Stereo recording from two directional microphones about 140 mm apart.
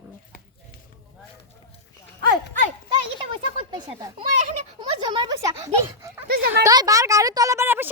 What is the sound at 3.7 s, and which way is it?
A child's voice, 30° right (ahead or behind).